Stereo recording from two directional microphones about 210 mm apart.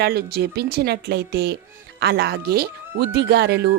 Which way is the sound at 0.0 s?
50° right (ahead or behind).